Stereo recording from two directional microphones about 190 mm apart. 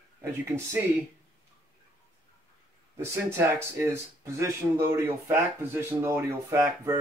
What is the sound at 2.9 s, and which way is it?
Speech, 15° right (ahead or behind).